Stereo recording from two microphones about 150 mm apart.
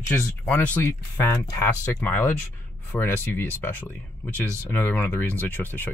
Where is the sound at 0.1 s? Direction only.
10° left (ahead or behind).